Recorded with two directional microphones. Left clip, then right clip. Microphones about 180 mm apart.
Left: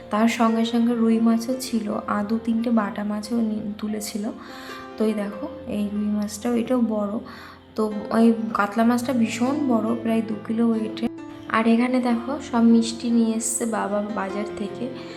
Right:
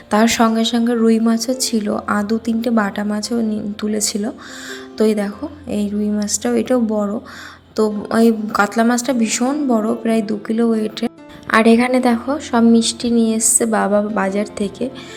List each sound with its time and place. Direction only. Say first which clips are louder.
0.1 s a woman's voice: right 6 dB; 30° right (ahead or behind)